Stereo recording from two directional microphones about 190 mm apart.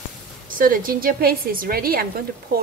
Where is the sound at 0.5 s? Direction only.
45° right (ahead or behind).